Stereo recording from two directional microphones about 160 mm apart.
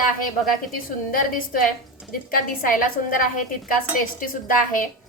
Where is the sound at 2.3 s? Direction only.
60° left (ahead or behind).